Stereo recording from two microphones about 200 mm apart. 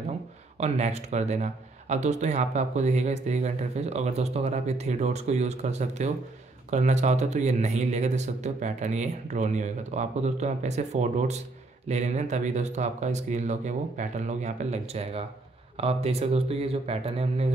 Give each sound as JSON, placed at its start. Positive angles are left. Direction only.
{"t": 0.6, "sound": "speech", "side_deg": -35}